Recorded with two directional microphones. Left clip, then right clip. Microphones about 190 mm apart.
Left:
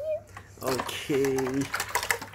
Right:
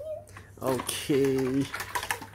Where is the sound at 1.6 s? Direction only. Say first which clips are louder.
Left 4 dB; 30° left (ahead or behind).